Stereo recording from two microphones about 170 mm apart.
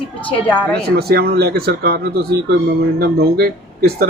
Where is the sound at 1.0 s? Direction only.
65° right (ahead or behind).